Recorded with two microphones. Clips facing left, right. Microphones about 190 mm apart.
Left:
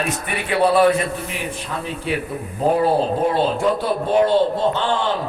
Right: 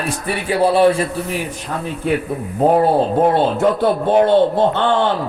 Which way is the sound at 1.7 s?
45° right (ahead or behind).